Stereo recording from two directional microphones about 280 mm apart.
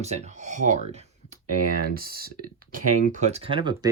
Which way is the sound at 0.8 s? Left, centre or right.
Right.